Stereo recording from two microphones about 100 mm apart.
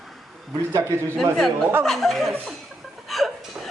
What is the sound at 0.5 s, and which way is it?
Speech, 35° right (ahead or behind).